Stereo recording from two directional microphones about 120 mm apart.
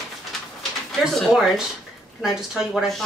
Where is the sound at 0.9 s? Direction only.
Centre (ahead or behind).